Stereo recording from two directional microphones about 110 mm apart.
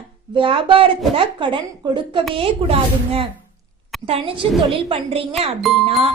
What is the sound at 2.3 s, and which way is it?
A woman's voice, 60° right (ahead or behind).